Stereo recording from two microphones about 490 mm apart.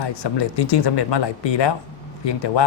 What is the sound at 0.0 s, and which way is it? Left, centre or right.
Speech, left.